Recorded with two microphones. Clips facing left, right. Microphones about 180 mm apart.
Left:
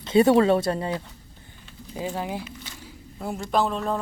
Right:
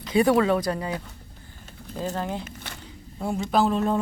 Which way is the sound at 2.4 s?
55° right (ahead or behind).